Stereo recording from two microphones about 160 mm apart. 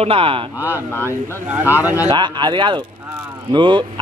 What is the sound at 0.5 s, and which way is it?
Speech, 10° right (ahead or behind).